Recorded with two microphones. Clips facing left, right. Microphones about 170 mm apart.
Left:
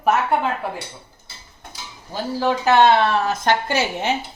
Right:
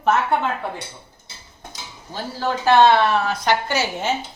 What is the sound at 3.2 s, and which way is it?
Speech, 45° left (ahead or behind).